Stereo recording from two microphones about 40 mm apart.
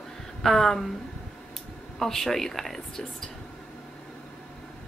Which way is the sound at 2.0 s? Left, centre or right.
Centre.